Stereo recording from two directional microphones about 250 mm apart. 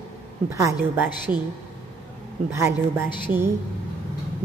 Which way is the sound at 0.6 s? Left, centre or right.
Centre.